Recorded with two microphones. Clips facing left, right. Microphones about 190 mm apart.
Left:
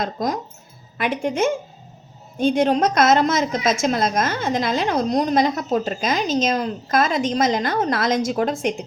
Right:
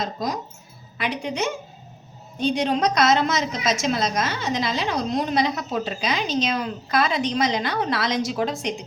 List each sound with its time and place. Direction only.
0.0 s a woman's voice: 50° left (ahead or behind)